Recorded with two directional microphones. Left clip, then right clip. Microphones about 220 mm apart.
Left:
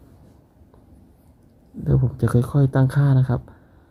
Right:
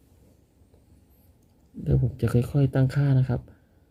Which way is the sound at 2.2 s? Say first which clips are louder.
Left 4 dB; 20° right (ahead or behind).